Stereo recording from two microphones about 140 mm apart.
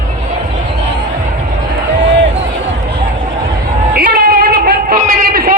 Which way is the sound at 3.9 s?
90° right.